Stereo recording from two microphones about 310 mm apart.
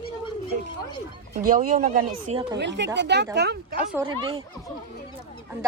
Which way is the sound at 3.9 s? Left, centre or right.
Centre.